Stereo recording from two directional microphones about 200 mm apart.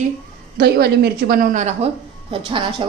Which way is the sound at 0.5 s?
50° right (ahead or behind).